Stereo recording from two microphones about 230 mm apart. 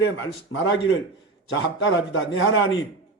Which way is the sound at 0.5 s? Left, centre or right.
Left.